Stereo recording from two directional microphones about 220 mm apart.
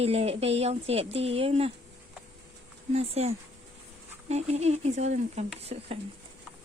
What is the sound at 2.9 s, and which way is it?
Speech, 30° right (ahead or behind).